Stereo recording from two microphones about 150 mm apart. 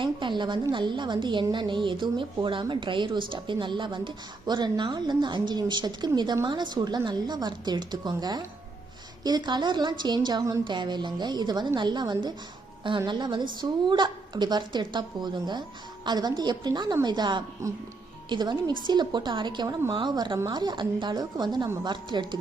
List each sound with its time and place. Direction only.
0.0 s a woman's voice: 30° right (ahead or behind)